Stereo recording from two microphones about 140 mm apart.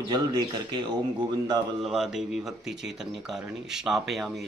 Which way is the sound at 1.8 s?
5° right (ahead or behind).